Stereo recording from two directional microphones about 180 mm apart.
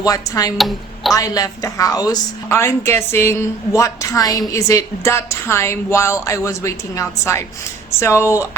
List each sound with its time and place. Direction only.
0.0 s speech: 20° left (ahead or behind)
0.5 s a woman's voice: centre (ahead or behind)
1.1 s a woman's voice: 20° left (ahead or behind)